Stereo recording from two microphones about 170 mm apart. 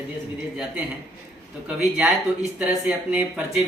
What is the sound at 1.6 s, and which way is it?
Speech, 5° right (ahead or behind).